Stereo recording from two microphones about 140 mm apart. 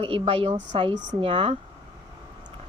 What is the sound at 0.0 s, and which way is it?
Speech, 40° right (ahead or behind).